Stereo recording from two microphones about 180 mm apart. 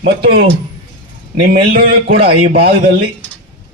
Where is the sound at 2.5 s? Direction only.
55° right (ahead or behind).